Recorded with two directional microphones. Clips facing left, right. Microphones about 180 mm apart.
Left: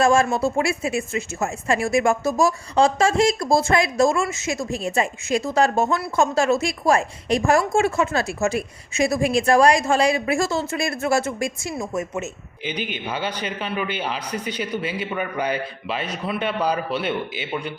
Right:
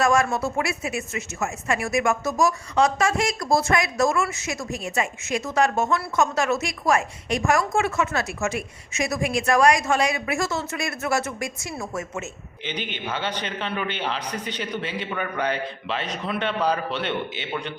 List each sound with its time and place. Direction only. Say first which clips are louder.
0.0 s speech: left 3 dB; 30° left (ahead or behind); by 17.7 s 10° left (ahead or behind)